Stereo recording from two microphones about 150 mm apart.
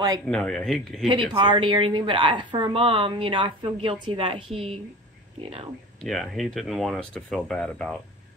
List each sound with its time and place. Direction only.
0.3 s speech: 5° left (ahead or behind)
1.0 s a woman's voice: 35° right (ahead or behind)
6.0 s speech: centre (ahead or behind)